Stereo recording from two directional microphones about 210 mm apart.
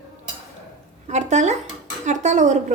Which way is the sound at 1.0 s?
35° right (ahead or behind).